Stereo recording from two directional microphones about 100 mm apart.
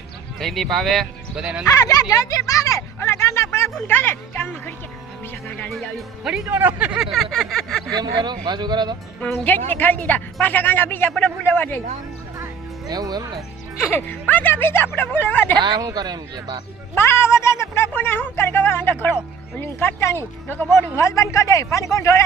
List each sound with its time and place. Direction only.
0.3 s speech: centre (ahead or behind)
1.6 s a sound: 35° left (ahead or behind)
3.8 s speech: 20° left (ahead or behind)
5.6 s speech: 5° left (ahead or behind)
6.5 s speech: 20° right (ahead or behind)
7.0 s speech: centre (ahead or behind)
7.9 s speech: 45° right (ahead or behind)
9.4 s a woman's voice: 20° left (ahead or behind)
12.9 s speech: 40° right (ahead or behind)
13.9 s speech: 15° left (ahead or behind)
15.5 s speech: 45° right (ahead or behind)
16.9 s speech: 25° left (ahead or behind)